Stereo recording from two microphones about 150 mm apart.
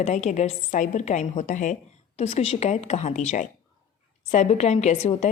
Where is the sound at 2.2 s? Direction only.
45° left (ahead or behind).